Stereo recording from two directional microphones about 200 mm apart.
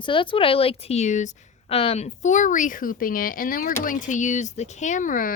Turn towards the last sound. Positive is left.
turn(degrees=40)  # may be behind; listen again after turning